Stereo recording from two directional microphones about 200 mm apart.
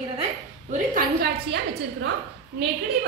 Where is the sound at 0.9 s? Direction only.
55° right (ahead or behind).